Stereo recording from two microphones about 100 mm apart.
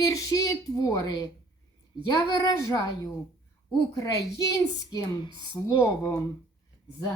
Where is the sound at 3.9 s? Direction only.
35° left (ahead or behind).